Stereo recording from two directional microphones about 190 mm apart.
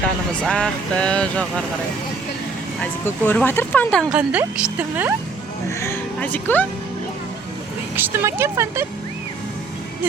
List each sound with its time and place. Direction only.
0.4 s speech: 5° left (ahead or behind)
2.8 s speech: 10° left (ahead or behind)
4.1 s speech: 5° right (ahead or behind)
5.8 s speech: 10° left (ahead or behind)
7.9 s speech: 10° right (ahead or behind)